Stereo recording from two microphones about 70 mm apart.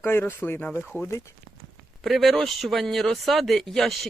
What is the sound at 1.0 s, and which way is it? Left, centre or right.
Speech, left.